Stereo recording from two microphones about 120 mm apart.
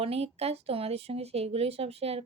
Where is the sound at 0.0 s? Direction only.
55° right (ahead or behind).